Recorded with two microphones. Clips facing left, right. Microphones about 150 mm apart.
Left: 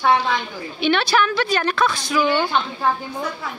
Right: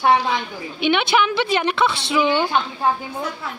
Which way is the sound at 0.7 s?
15° right (ahead or behind).